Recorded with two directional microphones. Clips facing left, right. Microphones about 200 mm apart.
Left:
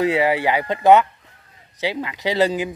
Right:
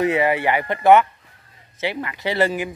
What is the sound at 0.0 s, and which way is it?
A man's voice, 10° left (ahead or behind).